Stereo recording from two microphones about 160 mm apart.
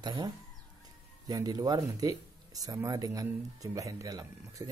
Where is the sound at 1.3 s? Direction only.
25° right (ahead or behind).